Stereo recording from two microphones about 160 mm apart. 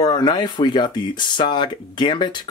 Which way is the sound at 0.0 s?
25° left (ahead or behind).